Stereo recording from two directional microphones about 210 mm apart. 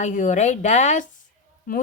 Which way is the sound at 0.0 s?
35° left (ahead or behind).